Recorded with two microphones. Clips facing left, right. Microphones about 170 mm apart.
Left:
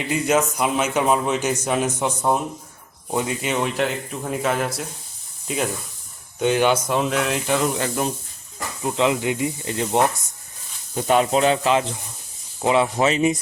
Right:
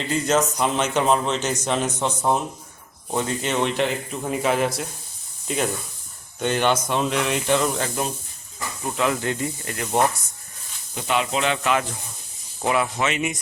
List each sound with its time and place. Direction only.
0.0 s speech: 10° left (ahead or behind)
8.8 s speech: 20° left (ahead or behind)
10.9 s speech: 45° left (ahead or behind)